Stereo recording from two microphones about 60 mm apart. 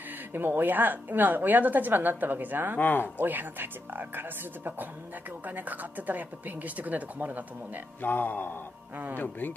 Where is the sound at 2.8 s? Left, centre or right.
Left.